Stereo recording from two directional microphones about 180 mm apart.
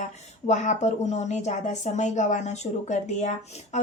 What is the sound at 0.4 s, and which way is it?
Speech, 40° left (ahead or behind).